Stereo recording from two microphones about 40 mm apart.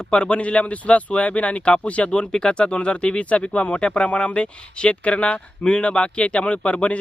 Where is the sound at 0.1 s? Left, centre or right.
Left.